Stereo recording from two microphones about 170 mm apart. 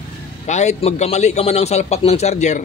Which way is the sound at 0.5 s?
40° left (ahead or behind).